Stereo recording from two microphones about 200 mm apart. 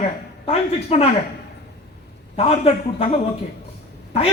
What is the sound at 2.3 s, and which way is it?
Speech, 30° left (ahead or behind).